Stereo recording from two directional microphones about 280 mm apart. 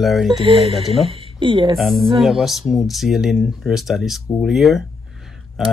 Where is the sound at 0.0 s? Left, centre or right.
Centre.